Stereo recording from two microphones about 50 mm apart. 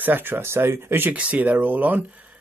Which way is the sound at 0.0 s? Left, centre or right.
Right.